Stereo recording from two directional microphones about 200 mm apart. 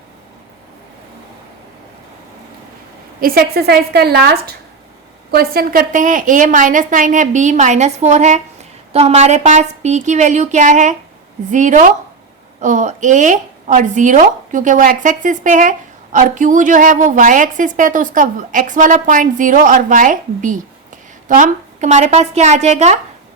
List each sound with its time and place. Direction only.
3.2 s a woman's voice: 45° right (ahead or behind)